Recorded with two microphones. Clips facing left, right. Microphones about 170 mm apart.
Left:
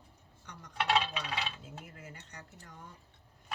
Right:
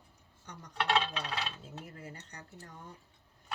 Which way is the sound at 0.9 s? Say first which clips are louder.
Even; 5° left (ahead or behind).